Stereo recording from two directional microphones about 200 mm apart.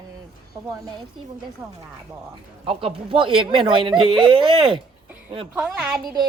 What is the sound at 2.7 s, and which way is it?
Speech, 25° right (ahead or behind).